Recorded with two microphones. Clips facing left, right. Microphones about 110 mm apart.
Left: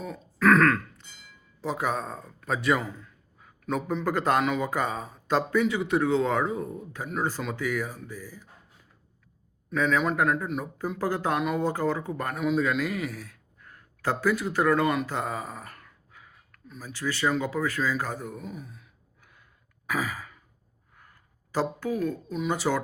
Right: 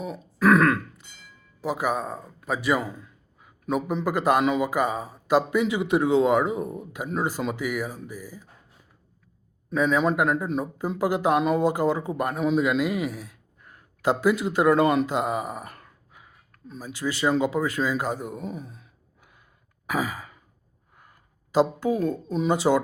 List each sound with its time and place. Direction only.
0.0 s burping: 15° right (ahead or behind)
1.6 s a man's voice: 5° right (ahead or behind)
9.6 s a man's voice: 20° right (ahead or behind)
16.5 s a sound: 30° right (ahead or behind)
16.8 s a man's voice: 15° right (ahead or behind)
18.4 s speech: 35° right (ahead or behind)
19.9 s sigh: 15° right (ahead or behind)
21.5 s speech: 20° right (ahead or behind)